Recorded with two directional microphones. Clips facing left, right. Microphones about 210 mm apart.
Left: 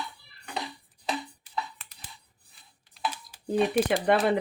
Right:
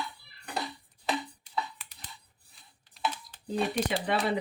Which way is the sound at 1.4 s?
5° left (ahead or behind).